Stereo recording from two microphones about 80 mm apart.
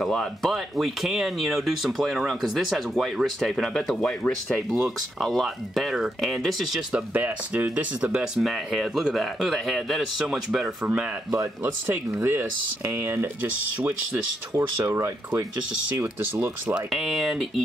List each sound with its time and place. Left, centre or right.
0.0 s speech: centre
4.2 s speech: centre
4.7 s speech: centre
6.9 s speech: centre
11.6 s speech: right
14.1 s speech: right
16.9 s speech: centre